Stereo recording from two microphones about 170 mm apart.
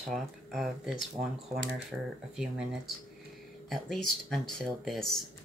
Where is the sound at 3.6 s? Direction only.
Centre (ahead or behind).